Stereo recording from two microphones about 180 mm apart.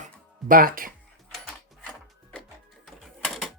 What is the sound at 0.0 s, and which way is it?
Music, 50° right (ahead or behind).